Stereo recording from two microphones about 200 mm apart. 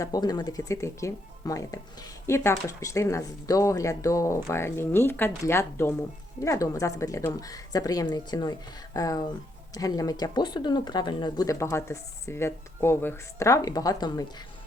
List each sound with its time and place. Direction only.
0.0 s speech: 20° left (ahead or behind)